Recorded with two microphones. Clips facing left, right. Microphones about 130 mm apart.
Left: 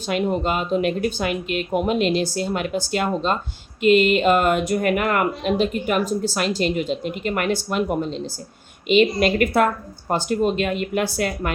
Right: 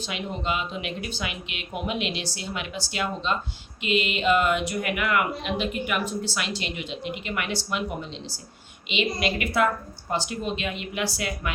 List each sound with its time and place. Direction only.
0.0 s speech: 50° left (ahead or behind)